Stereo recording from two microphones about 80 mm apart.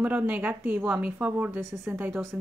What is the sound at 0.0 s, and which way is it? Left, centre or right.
Speech, centre.